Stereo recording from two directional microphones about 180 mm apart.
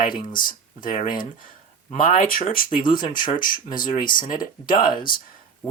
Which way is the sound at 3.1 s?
50° left (ahead or behind).